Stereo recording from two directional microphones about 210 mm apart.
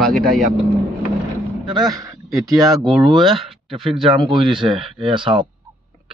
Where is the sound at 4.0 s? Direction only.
25° right (ahead or behind).